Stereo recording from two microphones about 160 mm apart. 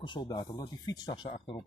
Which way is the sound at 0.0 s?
30° left (ahead or behind).